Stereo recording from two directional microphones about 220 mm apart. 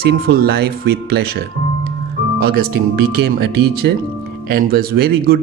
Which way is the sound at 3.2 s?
45° right (ahead or behind).